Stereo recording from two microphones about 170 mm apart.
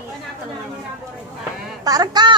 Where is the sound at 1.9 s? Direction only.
25° right (ahead or behind).